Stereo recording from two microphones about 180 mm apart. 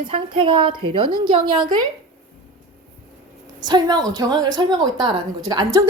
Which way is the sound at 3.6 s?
20° right (ahead or behind).